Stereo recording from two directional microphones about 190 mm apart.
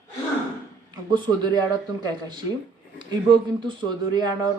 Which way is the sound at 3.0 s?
25° right (ahead or behind).